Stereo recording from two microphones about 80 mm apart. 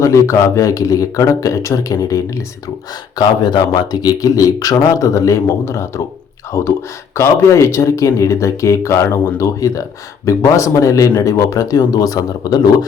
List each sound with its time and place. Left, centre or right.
0.0 s speech: left
3.2 s speech: left